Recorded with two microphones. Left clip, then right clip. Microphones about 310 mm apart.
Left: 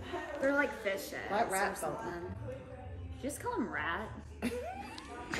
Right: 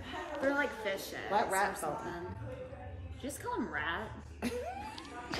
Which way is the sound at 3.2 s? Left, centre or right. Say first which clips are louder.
Left 1 dB; centre.